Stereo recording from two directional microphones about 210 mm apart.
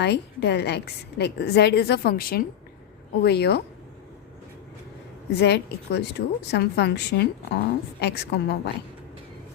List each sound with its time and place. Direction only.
0.0 s a woman's voice: 55° left (ahead or behind)
5.4 s a woman's voice: 50° left (ahead or behind)